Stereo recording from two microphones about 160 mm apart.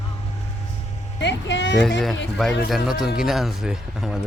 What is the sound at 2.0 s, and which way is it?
Speech, centre (ahead or behind).